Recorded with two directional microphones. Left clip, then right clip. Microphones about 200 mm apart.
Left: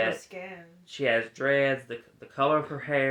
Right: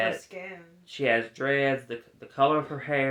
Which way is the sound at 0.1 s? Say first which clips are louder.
Even; 10° left (ahead or behind).